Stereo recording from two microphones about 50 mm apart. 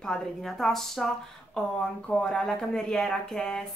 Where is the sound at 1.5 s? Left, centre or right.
Centre.